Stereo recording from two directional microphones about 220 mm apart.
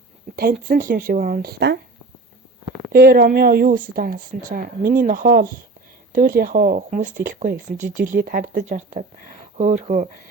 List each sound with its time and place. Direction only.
0.3 s speech: 40° right (ahead or behind)
2.7 s speech: 40° right (ahead or behind)